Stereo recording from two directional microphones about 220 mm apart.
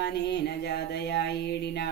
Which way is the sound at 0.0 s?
50° left (ahead or behind).